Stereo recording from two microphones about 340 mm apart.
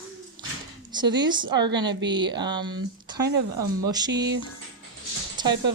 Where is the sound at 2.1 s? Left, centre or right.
Centre.